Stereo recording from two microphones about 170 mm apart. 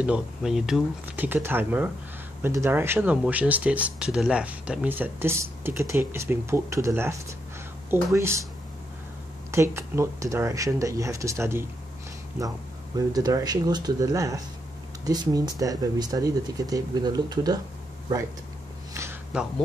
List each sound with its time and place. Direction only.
0.0 s speech: 5° right (ahead or behind)
9.5 s speech: 15° right (ahead or behind)